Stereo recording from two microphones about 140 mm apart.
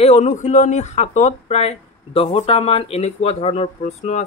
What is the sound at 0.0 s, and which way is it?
Speech, 55° left (ahead or behind).